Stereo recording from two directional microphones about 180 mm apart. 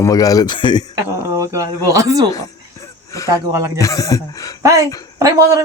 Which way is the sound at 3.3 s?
20° right (ahead or behind).